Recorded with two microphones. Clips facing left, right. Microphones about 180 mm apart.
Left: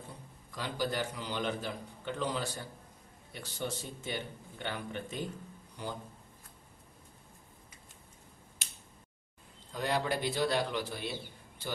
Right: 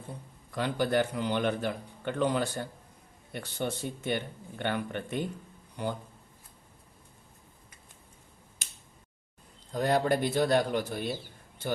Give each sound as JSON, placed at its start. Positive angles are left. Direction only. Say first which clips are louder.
{"t": 0.5, "sound": "a man's voice", "louder": "right 7 dB", "side_deg": -60}
{"t": 9.7, "sound": "a man's voice", "louder": "right 6 dB", "side_deg": -45}